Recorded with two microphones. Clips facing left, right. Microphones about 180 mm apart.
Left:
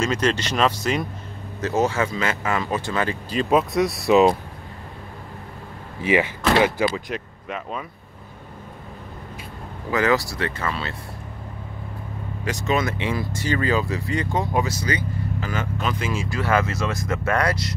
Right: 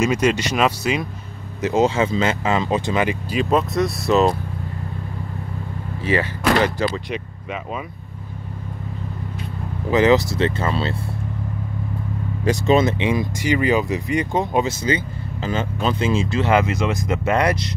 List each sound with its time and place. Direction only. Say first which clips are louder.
0.0 s speech: right 4 dB; 10° right (ahead or behind)
1.6 s speech: right 4 dB; 20° right (ahead or behind)
3.4 s speech: left 1 dB; 5° left (ahead or behind)
6.5 s speech: left 1 dB; 5° left (ahead or behind)
9.8 s speech: right 5 dB; 20° right (ahead or behind)
12.4 s speech: right 7 dB; 30° right (ahead or behind)